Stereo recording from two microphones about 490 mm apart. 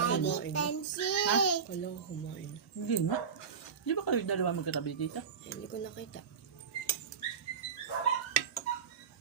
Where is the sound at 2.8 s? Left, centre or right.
Left.